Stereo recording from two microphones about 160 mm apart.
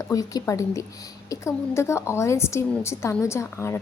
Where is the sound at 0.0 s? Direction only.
20° left (ahead or behind).